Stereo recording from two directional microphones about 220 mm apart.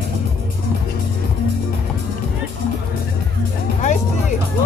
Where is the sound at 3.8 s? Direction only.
35° left (ahead or behind).